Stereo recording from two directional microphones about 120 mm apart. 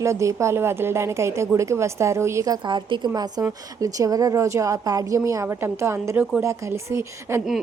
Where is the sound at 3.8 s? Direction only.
30° right (ahead or behind).